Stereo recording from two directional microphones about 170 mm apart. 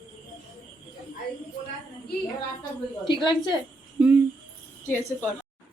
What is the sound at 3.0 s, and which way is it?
Speech, 25° left (ahead or behind).